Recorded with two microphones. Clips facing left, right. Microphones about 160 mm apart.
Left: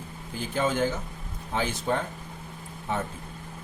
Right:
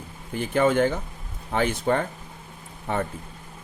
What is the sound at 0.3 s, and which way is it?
Speech, 60° right (ahead or behind).